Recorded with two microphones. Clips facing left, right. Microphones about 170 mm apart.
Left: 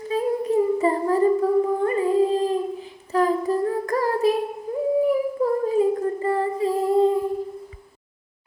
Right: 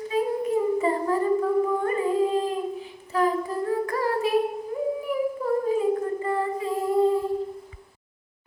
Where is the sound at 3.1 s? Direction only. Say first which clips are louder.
Left 4 dB; 40° left (ahead or behind).